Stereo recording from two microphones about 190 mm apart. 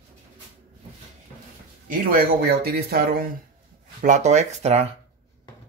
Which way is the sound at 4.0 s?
40° right (ahead or behind).